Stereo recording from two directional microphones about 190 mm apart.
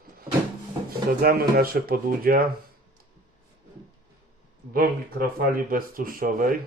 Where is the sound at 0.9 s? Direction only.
50° right (ahead or behind).